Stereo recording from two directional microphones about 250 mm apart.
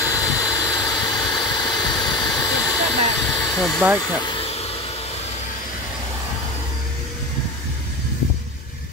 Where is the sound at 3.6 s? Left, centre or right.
Centre.